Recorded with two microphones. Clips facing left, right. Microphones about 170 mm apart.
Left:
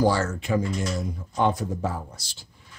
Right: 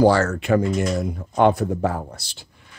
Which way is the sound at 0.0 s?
70° right (ahead or behind).